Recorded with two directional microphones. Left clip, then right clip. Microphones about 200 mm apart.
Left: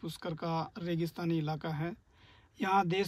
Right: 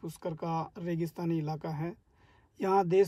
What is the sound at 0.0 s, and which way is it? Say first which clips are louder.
Speech: right 1 dB; 15° right (ahead or behind).